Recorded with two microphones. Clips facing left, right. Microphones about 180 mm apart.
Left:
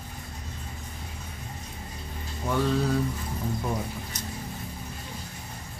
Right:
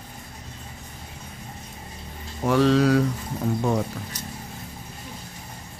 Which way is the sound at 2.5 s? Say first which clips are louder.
Right 7 dB; 90° right.